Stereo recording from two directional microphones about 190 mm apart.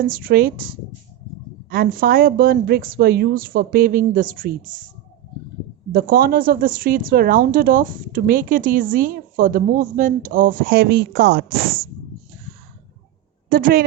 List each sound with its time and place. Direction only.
0.0 s speech: 50° right (ahead or behind)
5.9 s speech: 50° right (ahead or behind)
13.5 s speech: 50° right (ahead or behind)